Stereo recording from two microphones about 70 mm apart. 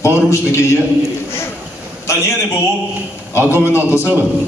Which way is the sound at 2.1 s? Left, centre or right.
Left.